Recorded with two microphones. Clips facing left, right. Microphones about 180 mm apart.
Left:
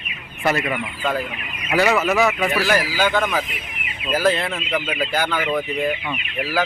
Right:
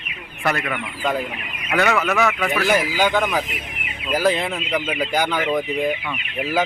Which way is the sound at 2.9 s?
15° right (ahead or behind).